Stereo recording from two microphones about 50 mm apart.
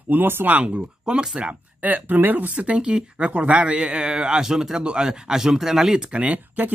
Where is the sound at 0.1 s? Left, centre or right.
Right.